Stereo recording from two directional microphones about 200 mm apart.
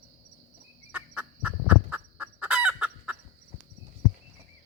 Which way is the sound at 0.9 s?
5° right (ahead or behind).